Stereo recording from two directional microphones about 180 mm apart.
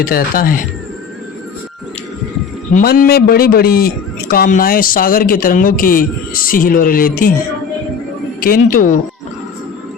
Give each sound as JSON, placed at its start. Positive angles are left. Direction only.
{"t": 0.0, "sound": "a man's voice", "side_deg": 55}
{"t": 2.7, "sound": "a man's voice", "side_deg": 55}
{"t": 8.4, "sound": "a man's voice", "side_deg": 55}